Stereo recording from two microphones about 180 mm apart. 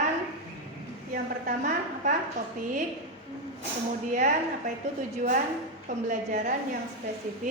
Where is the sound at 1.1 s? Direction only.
45° right (ahead or behind).